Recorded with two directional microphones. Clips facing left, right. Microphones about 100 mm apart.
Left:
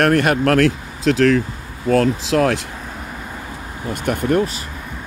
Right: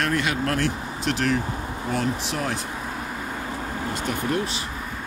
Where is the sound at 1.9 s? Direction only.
90° left.